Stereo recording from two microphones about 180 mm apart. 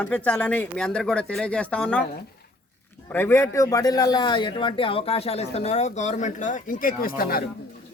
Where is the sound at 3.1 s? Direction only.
10° left (ahead or behind).